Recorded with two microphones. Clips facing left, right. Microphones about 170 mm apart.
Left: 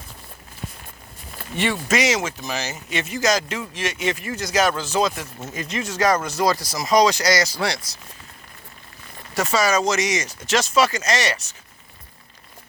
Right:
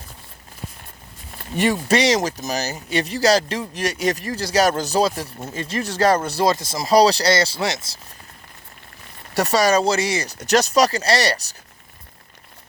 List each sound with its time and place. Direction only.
1.5 s speech: 40° right (ahead or behind); by 7.9 s 25° right (ahead or behind)
9.3 s speech: 35° right (ahead or behind)